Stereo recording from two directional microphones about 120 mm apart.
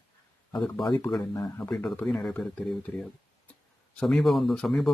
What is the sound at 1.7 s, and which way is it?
Speech, 10° left (ahead or behind).